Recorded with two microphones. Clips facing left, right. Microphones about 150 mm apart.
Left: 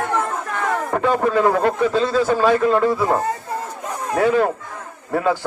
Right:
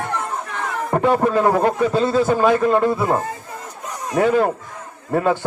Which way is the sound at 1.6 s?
20° right (ahead or behind).